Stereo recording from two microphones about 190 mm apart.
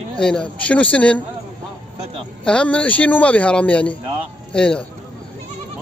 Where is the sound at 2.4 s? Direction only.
5° left (ahead or behind).